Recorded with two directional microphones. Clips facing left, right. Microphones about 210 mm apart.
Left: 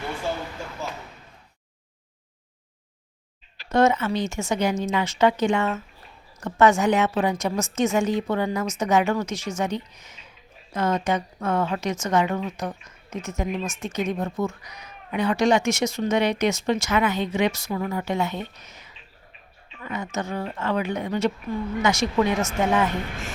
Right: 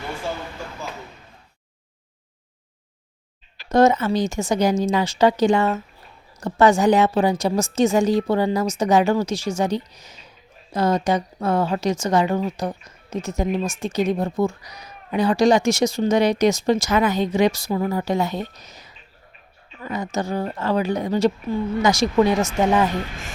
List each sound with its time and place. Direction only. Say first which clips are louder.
3.7 s speech: right 4 dB; 35° right (ahead or behind)